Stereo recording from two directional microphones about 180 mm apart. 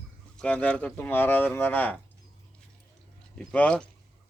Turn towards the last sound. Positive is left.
turn(degrees=5)  # may be behind; listen again after turning